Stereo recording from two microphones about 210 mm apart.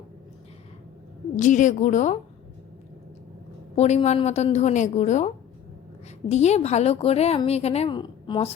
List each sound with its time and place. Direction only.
1.4 s a woman's voice: 35° left (ahead or behind)
3.8 s a woman's voice: 30° left (ahead or behind)